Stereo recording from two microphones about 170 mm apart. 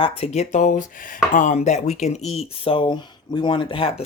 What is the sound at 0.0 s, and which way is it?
Speech, 35° left (ahead or behind).